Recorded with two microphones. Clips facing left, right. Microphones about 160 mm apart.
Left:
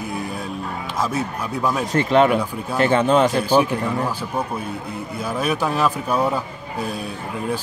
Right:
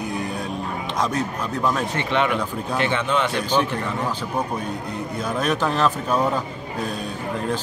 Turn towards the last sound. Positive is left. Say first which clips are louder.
# left 1 dB
turn(degrees=10)  # may be behind; listen again after turning